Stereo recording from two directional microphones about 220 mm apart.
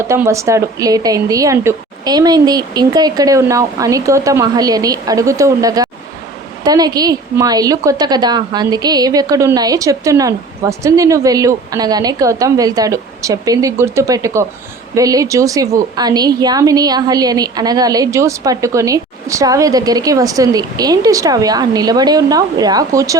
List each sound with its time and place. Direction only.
0.0 s a woman's voice: 10° right (ahead or behind)